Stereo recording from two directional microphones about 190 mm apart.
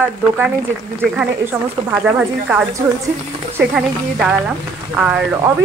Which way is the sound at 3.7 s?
5° right (ahead or behind).